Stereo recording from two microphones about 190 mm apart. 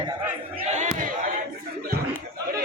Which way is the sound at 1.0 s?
45° right (ahead or behind).